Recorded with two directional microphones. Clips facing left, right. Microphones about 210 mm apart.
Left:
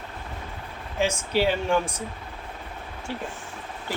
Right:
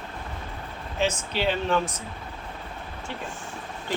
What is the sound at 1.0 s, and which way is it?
Speech, 10° left (ahead or behind).